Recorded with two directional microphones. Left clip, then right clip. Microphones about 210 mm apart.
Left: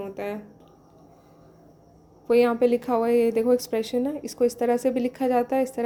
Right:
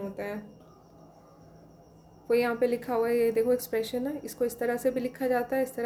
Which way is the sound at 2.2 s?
30° left (ahead or behind).